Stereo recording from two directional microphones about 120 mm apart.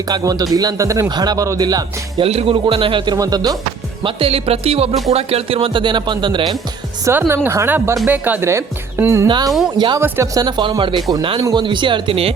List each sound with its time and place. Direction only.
0.1 s speech: 35° right (ahead or behind)
2.2 s speech: 55° right (ahead or behind)
3.2 s speech: 30° right (ahead or behind)
4.0 s speech: 50° right (ahead or behind)
7.0 s speech: 20° right (ahead or behind)
9.2 s speech: 40° right (ahead or behind)
10.0 s speech: 20° right (ahead or behind)
10.4 s speech: 40° right (ahead or behind)